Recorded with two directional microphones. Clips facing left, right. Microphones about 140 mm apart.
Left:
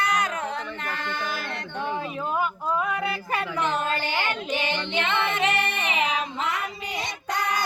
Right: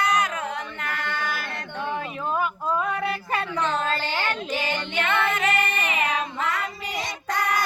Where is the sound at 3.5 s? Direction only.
15° left (ahead or behind).